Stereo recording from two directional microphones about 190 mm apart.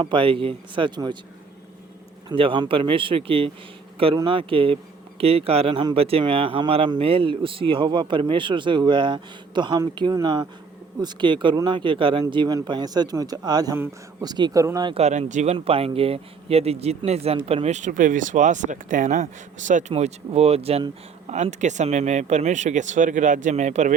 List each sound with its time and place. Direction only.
0.0 s speech: 25° right (ahead or behind)
2.3 s speech: 30° right (ahead or behind)
14.9 s speech: 35° right (ahead or behind)